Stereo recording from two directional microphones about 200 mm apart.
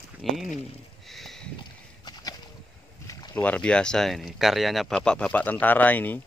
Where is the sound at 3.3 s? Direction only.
5° left (ahead or behind).